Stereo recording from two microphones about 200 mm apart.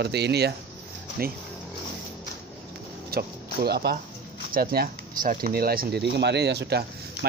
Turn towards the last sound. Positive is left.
turn(degrees=-55)  # may be behind; listen again after turning